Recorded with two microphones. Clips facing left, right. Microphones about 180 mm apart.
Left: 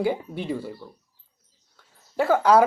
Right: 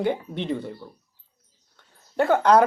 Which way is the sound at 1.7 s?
5° left (ahead or behind).